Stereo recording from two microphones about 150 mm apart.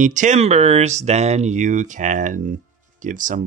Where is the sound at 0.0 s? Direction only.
55° right (ahead or behind).